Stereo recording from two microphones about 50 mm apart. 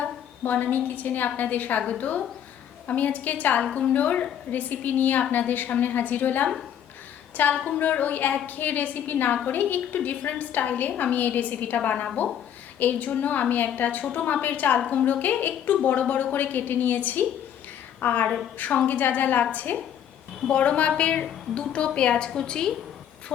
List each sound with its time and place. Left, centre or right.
0.0 s a woman's voice: left
7.6 s a woman's voice: left
20.5 s a woman's voice: left